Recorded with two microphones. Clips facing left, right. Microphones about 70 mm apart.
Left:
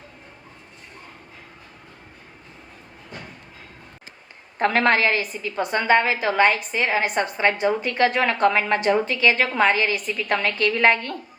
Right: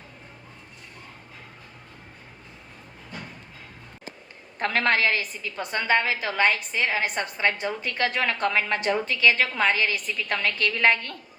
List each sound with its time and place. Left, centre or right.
4.5 s a woman's voice: left